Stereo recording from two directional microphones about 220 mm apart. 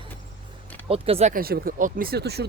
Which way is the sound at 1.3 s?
45° right (ahead or behind).